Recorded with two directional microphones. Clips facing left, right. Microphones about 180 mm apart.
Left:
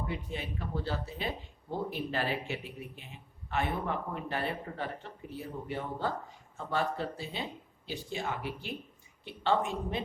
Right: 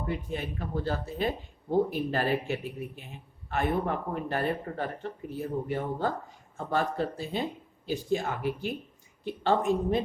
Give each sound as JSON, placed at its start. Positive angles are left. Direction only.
{"t": 0.0, "sound": "speech", "side_deg": -50}